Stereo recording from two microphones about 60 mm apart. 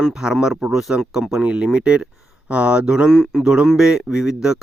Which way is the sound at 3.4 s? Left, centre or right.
Centre.